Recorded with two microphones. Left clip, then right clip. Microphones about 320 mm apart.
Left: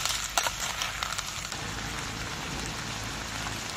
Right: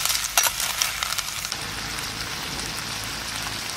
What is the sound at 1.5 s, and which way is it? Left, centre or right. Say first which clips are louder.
Rain on surface: right 5 dB; centre.